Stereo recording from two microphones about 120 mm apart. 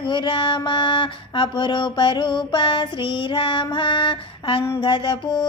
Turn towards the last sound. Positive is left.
turn(degrees=40)  # may be behind; listen again after turning